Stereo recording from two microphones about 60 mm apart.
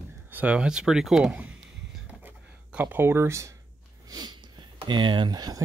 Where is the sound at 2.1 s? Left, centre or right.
Right.